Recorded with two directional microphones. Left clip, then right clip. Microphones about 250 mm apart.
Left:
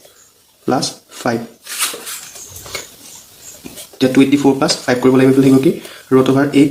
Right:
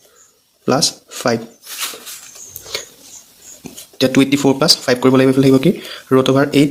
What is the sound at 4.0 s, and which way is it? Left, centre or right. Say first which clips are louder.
Speech: left 2 dB; right.